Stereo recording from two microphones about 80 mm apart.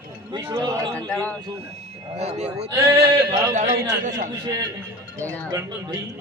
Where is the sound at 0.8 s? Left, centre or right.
Centre.